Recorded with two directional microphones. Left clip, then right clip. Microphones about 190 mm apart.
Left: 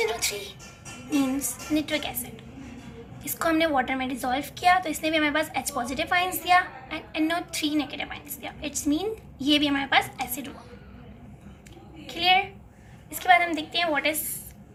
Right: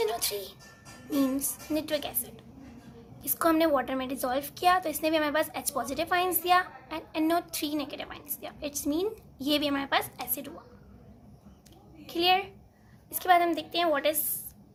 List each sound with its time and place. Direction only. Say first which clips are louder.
0.0 s music: left 3 dB; 55° right (ahead or behind)
1.7 s a woman's voice: left 3 dB; 55° right (ahead or behind)
12.2 s a woman's voice: left 4 dB; 55° right (ahead or behind)